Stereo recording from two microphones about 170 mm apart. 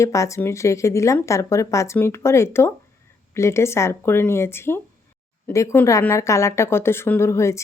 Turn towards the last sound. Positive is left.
turn(degrees=15)  # may be behind; listen again after turning